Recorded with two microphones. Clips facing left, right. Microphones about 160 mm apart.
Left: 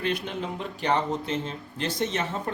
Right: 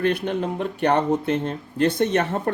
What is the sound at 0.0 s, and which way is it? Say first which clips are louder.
Speech: right 7 dB; 55° right (ahead or behind).